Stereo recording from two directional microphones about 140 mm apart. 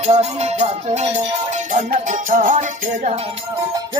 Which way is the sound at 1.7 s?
65° right (ahead or behind).